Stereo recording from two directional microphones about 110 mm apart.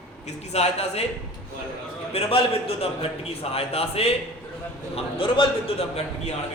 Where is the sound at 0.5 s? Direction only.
75° left (ahead or behind).